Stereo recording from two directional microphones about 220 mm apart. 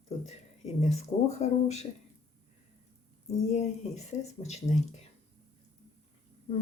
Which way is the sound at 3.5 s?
30° left (ahead or behind).